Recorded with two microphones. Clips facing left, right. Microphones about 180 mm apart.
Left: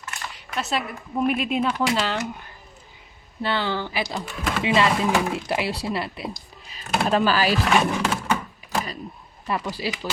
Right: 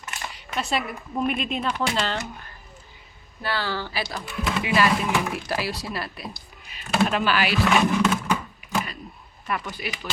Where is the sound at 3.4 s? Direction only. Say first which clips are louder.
Left 3 dB; 20° left (ahead or behind).